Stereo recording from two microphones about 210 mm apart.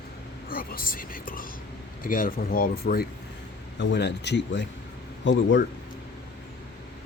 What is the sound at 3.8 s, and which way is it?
Speech, 55° left (ahead or behind).